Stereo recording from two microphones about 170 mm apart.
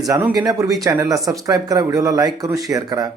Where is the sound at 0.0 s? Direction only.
15° right (ahead or behind).